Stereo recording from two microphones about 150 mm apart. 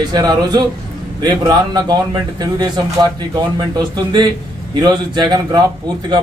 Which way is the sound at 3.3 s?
30° right (ahead or behind).